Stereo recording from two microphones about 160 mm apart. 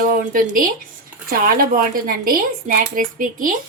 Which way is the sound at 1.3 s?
65° right (ahead or behind).